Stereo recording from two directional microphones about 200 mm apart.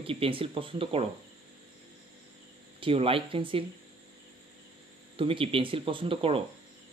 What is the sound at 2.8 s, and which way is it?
Speech, 25° right (ahead or behind).